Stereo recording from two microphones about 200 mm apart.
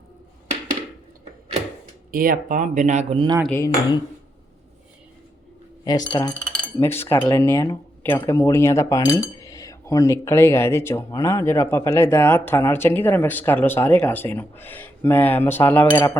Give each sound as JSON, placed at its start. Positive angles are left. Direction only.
{"t": 2.1, "sound": "speech", "side_deg": -45}
{"t": 3.4, "sound": "speech", "side_deg": 10}
{"t": 5.8, "sound": "speech", "side_deg": 20}